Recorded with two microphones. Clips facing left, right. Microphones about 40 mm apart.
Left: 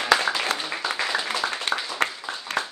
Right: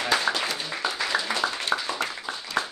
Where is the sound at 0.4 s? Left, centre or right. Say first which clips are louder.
Left 3 dB; left.